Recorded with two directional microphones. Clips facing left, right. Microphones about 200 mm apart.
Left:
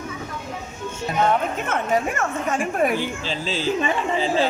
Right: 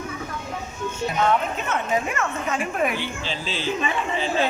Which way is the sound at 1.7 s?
45° left (ahead or behind).